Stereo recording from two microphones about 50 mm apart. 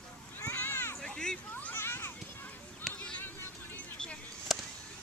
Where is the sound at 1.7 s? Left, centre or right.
Left.